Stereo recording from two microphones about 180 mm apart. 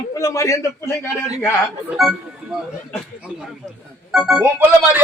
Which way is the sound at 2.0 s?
Centre (ahead or behind).